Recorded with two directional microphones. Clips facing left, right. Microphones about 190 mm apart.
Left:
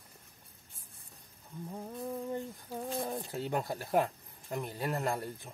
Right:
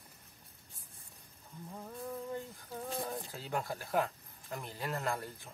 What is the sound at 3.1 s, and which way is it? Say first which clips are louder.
Speech: left 4 dB; 25° left (ahead or behind).